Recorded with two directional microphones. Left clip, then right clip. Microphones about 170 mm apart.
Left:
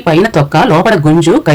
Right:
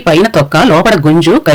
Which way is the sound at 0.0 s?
20° right (ahead or behind).